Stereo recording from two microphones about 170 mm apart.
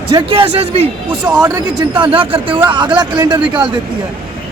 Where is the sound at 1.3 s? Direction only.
20° right (ahead or behind).